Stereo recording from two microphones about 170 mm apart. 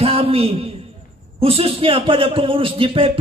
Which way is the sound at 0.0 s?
35° right (ahead or behind).